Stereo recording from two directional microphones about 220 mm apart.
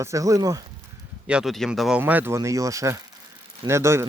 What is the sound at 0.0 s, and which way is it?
Speech, 15° right (ahead or behind).